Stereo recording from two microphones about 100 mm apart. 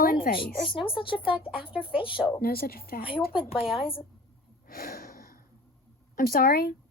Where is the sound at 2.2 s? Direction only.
20° left (ahead or behind).